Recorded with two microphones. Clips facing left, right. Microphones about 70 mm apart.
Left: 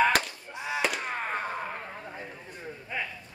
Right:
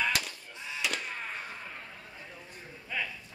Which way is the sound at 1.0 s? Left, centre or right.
Left.